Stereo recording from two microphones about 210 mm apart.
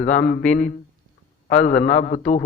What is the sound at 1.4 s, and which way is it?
Speech, 40° left (ahead or behind).